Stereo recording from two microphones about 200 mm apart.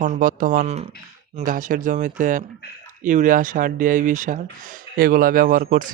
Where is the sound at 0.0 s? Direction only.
40° right (ahead or behind).